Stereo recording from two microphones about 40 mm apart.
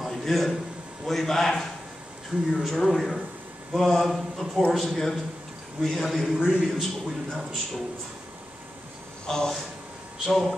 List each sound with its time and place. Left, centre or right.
0.0 s a sound: centre
1.0 s a man's voice: centre
6.3 s a man's voice: right
6.7 s a man's voice: centre
9.3 s a man's voice: centre